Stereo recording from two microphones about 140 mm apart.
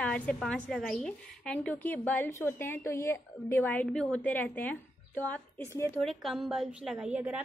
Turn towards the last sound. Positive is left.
turn(degrees=-10)  # may be behind; listen again after turning